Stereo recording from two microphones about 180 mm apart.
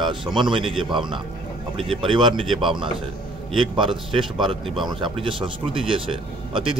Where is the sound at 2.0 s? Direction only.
25° right (ahead or behind).